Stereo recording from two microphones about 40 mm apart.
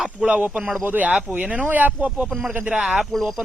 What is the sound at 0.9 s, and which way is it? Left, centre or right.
Speech, right.